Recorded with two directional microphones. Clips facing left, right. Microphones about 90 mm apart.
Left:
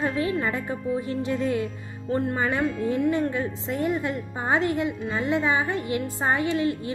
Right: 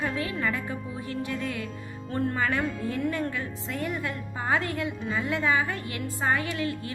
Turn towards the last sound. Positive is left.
turn(degrees=25)  # may be behind; listen again after turning